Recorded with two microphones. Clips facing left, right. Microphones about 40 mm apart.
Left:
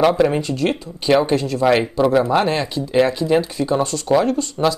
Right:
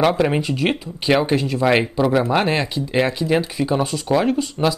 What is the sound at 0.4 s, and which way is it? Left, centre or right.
Speech, centre.